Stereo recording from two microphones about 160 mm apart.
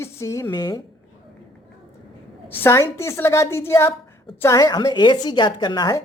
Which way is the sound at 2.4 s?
15° left (ahead or behind).